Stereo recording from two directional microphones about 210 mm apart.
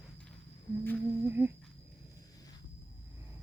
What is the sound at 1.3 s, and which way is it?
Speech, 10° right (ahead or behind).